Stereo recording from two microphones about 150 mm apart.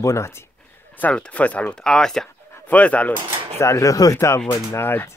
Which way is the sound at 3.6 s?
20° left (ahead or behind).